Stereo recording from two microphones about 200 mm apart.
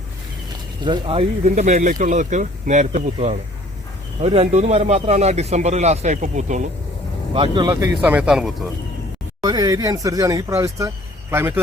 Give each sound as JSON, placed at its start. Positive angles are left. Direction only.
{"t": 0.9, "sound": "speech", "side_deg": -25}
{"t": 7.3, "sound": "speech", "side_deg": -25}
{"t": 9.4, "sound": "speech", "side_deg": -20}